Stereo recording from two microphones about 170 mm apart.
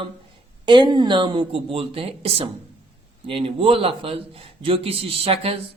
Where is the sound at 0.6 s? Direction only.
30° right (ahead or behind).